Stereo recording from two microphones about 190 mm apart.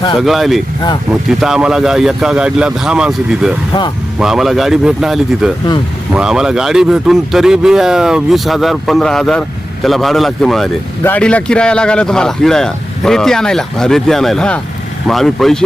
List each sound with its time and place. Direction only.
0.2 s a man's voice: centre (ahead or behind)
3.7 s speech: 25° left (ahead or behind)
4.2 s a man's voice: centre (ahead or behind)